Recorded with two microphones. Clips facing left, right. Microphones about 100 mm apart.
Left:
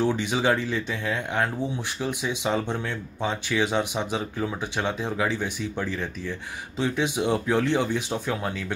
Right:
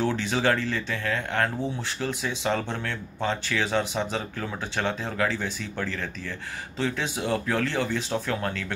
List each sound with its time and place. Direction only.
0.0 s speech: 15° left (ahead or behind)